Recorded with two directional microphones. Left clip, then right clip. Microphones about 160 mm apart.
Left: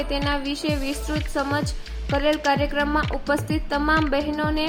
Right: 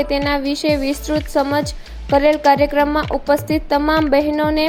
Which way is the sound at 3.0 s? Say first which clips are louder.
Right 6 dB; centre (ahead or behind).